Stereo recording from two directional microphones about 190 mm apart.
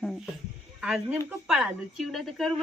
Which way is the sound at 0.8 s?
5° right (ahead or behind).